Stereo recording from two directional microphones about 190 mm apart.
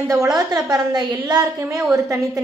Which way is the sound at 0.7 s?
20° right (ahead or behind).